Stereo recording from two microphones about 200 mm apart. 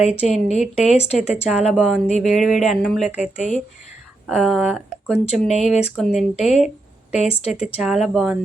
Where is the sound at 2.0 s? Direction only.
35° left (ahead or behind).